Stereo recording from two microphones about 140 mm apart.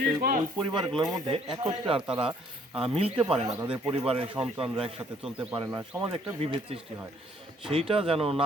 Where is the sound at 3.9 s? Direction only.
40° right (ahead or behind).